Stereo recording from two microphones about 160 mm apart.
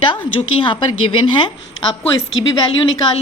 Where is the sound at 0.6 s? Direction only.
30° left (ahead or behind).